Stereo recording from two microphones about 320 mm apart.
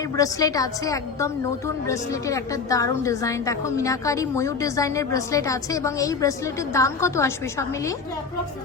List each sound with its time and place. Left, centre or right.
0.0 s a woman's voice: centre